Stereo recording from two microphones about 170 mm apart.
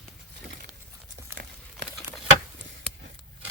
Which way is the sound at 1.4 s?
65° right (ahead or behind).